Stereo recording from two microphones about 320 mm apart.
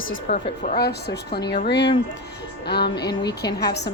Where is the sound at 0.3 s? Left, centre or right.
Left.